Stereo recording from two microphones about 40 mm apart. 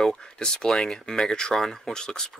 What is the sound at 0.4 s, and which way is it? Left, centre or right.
Speech, centre.